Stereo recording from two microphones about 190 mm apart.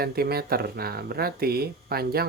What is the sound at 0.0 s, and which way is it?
Speech, 55° right (ahead or behind).